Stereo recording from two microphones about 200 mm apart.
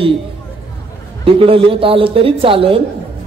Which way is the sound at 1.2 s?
25° right (ahead or behind).